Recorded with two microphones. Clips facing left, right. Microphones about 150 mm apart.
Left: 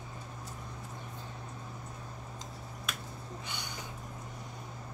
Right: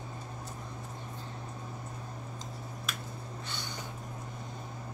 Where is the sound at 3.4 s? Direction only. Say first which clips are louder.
Right 1 dB; 15° left (ahead or behind).